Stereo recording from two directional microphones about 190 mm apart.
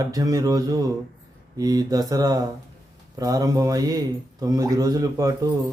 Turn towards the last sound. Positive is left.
turn(degrees=-20)  # may be behind; listen again after turning